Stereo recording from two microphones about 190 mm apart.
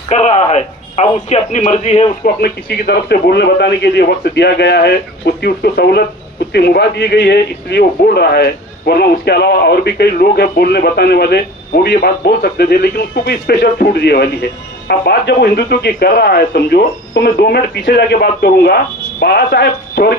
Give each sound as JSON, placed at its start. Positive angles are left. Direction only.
{"t": 0.1, "sound": "speech", "side_deg": 35}
{"t": 2.2, "sound": "a man's voice", "side_deg": 55}